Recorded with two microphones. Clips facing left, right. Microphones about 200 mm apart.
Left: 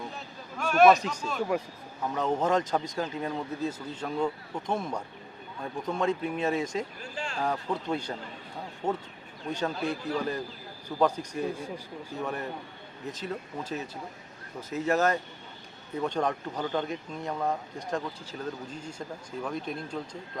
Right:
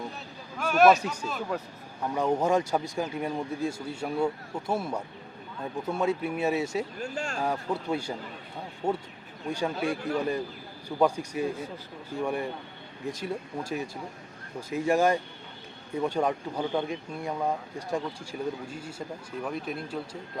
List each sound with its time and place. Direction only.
0.6 s a man's voice: centre (ahead or behind)
7.0 s speech: 45° right (ahead or behind)
7.4 s speech: 10° right (ahead or behind)